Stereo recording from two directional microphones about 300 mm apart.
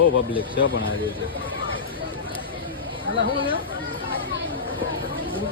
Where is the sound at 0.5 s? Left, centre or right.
Left.